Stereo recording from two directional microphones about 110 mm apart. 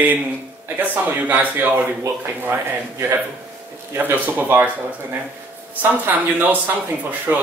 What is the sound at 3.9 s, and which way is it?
Speech, 15° right (ahead or behind).